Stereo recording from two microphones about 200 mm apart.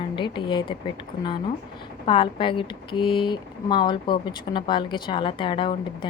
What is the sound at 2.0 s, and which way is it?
Speech, 25° left (ahead or behind).